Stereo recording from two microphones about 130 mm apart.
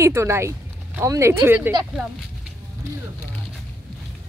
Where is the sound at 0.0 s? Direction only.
20° right (ahead or behind).